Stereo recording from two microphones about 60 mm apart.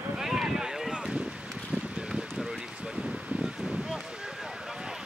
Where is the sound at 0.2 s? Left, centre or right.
Centre.